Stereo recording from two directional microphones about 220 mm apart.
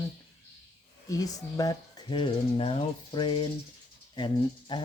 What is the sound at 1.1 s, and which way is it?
Speech, 15° left (ahead or behind).